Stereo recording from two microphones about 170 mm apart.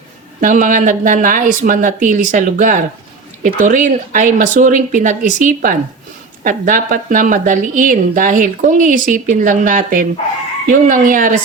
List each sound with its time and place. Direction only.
0.4 s speech: 50° right (ahead or behind)